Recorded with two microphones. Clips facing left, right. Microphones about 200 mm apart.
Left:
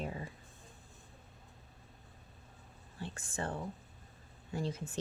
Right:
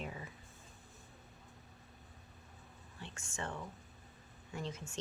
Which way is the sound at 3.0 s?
35° left (ahead or behind).